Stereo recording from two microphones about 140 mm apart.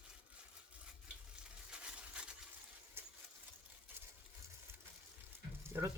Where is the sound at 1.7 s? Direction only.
5° right (ahead or behind).